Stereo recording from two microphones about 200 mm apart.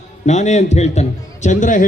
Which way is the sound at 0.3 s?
35° left (ahead or behind).